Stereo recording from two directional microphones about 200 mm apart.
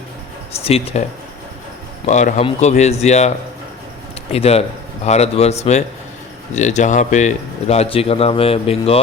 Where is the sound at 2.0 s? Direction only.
35° left (ahead or behind).